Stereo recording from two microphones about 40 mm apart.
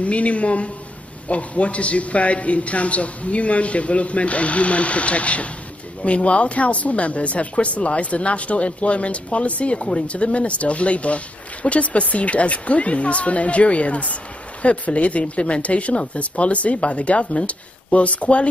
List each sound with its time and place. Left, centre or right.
0.0 s speech: left